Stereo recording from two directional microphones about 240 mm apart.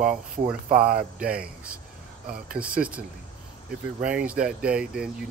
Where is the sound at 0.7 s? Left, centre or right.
Right.